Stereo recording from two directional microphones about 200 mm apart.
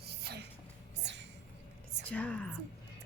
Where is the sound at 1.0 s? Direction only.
60° right (ahead or behind).